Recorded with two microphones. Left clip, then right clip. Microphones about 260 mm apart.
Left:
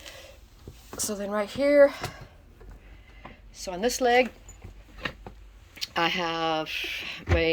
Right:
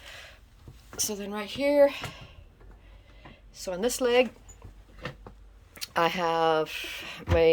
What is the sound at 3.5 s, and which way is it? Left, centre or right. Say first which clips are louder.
Speech: left 1 dB; centre.